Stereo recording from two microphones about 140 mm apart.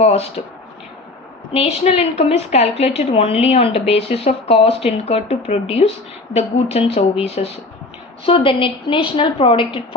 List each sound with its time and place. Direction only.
0.0 s a woman's voice: 45° left (ahead or behind)
1.5 s a woman's voice: 50° left (ahead or behind)